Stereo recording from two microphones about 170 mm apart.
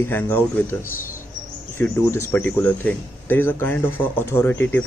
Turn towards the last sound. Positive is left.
turn(degrees=10)  # may be behind; listen again after turning